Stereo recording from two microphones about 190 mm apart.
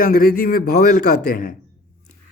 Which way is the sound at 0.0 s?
50° left (ahead or behind).